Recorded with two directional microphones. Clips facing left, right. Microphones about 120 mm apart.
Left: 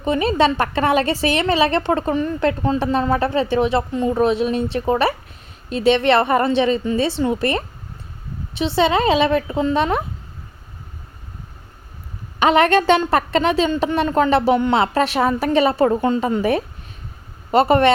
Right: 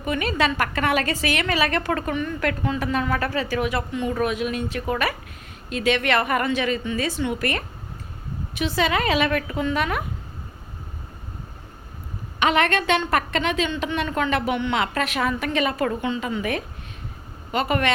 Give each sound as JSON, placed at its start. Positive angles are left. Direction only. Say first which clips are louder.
{"t": 0.0, "sound": "a woman's voice", "louder": "left 6 dB", "side_deg": 30}
{"t": 12.4, "sound": "a woman's voice", "louder": "left 6 dB", "side_deg": 35}